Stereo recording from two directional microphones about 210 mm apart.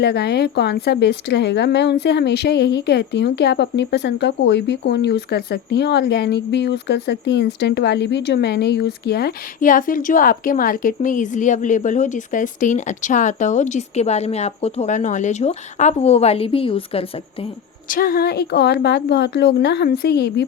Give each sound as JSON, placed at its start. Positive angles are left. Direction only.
{"t": 0.0, "sound": "speech", "side_deg": 50}
{"t": 17.8, "sound": "speech", "side_deg": 45}